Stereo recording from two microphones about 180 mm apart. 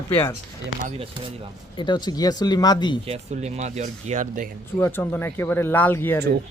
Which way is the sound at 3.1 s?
35° right (ahead or behind).